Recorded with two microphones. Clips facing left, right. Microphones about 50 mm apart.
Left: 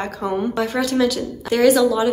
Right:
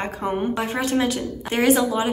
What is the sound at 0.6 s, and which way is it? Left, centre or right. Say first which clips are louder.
Speech: left 5 dB; right.